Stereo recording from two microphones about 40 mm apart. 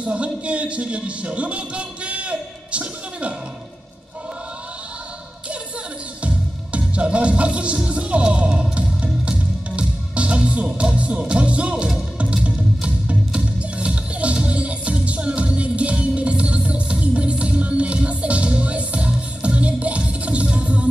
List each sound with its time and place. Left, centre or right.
0.0 s speech: right
6.2 s music: right